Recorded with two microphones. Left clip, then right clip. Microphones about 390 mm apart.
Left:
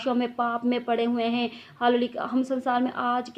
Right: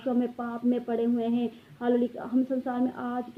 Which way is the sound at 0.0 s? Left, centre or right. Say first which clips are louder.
Left 4 dB; centre.